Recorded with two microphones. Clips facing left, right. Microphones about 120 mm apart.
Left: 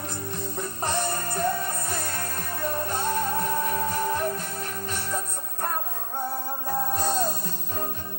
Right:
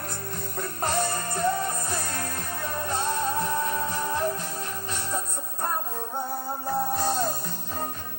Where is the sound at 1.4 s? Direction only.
30° right (ahead or behind).